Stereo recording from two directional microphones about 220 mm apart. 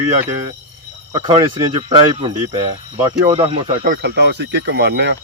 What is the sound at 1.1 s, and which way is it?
Speech, 20° right (ahead or behind).